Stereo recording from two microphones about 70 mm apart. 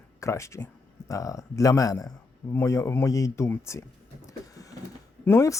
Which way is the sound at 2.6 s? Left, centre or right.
Left.